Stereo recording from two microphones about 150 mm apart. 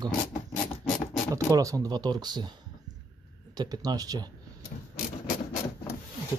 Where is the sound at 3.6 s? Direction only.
25° right (ahead or behind).